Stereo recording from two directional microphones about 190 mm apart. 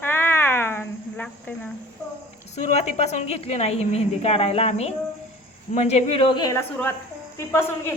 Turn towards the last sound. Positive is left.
turn(degrees=15)  # may be behind; listen again after turning